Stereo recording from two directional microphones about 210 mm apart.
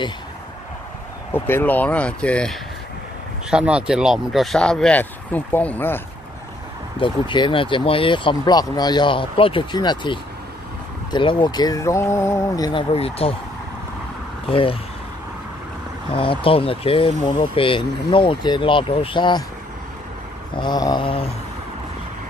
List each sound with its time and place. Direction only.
1.3 s speech: 10° left (ahead or behind)
7.0 s speech: 25° left (ahead or behind)
14.5 s speech: 25° left (ahead or behind)
16.1 s speech: 25° left (ahead or behind)
20.5 s speech: 20° left (ahead or behind)